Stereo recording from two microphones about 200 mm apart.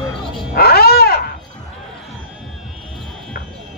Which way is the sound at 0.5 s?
50° left (ahead or behind).